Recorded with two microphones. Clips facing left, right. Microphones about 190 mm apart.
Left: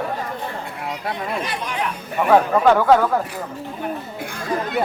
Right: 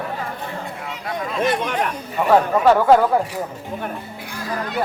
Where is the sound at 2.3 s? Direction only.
5° right (ahead or behind).